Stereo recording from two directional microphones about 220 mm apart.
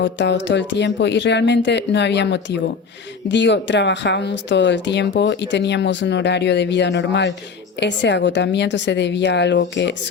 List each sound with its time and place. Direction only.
0.0 s speech: 55° left (ahead or behind)